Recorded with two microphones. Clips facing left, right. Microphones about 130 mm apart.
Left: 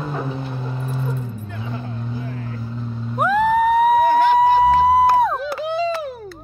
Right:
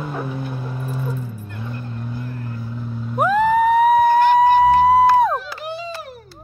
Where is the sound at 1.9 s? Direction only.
Centre (ahead or behind).